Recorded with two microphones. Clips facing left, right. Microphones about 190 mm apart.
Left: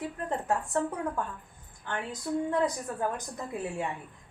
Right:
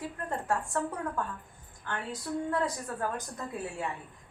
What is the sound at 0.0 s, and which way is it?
A woman's voice, 20° left (ahead or behind).